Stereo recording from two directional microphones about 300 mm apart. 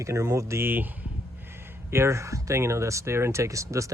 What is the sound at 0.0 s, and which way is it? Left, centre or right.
Speech, centre.